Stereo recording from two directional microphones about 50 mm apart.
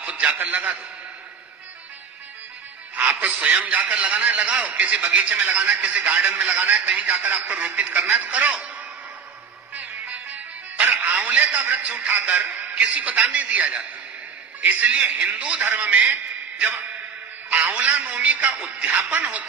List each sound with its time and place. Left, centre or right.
0.0 s a sound: right
0.4 s a man's voice: right
2.9 s a man's voice: right
6.2 s a man's voice: right
9.7 s music: right
10.8 s music: right
11.5 s a man's voice: right
15.6 s a man's voice: right